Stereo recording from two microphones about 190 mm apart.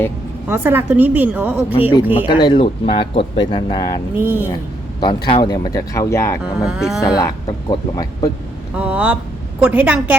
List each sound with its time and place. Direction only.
0.4 s a woman's voice: 10° right (ahead or behind)
2.2 s speech: 25° left (ahead or behind)
4.2 s a woman's voice: 10° right (ahead or behind)
4.9 s speech: 25° left (ahead or behind)
6.7 s speech: centre (ahead or behind)
7.0 s speech: 20° left (ahead or behind)
8.7 s a woman's voice: 5° right (ahead or behind)